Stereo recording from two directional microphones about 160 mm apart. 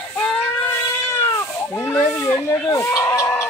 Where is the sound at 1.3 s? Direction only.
20° left (ahead or behind).